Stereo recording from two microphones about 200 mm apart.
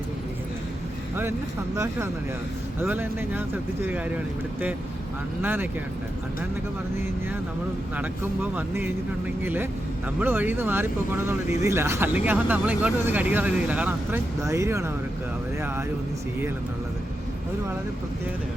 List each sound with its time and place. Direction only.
1.7 s speech: 15° right (ahead or behind)
5.4 s speech: 10° right (ahead or behind)
8.5 s speech: 10° right (ahead or behind)